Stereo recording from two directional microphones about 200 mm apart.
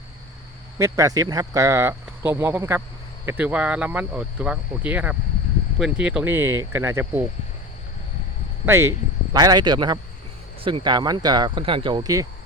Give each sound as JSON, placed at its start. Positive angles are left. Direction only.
{"t": 0.8, "sound": "speech", "side_deg": -15}
{"t": 8.6, "sound": "speech", "side_deg": -10}